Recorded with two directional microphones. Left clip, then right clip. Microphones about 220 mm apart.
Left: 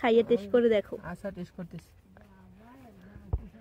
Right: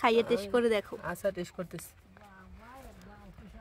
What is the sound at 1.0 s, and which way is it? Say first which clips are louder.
Speech: right 6 dB; 30° right (ahead or behind).